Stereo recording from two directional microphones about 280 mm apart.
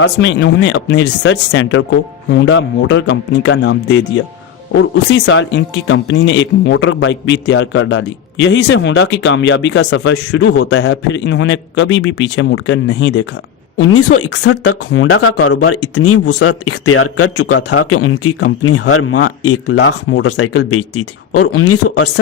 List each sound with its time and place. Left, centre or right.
0.0 s speech: left